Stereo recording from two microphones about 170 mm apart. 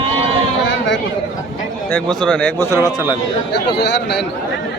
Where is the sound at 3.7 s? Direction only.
80° left.